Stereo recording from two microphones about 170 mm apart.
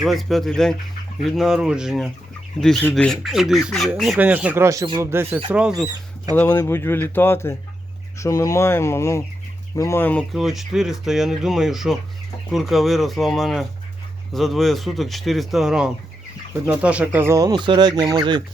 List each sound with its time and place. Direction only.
0.0 s speech: centre (ahead or behind)
6.3 s speech: 10° left (ahead or behind)
10.3 s speech: centre (ahead or behind); by 18.4 s 25° right (ahead or behind)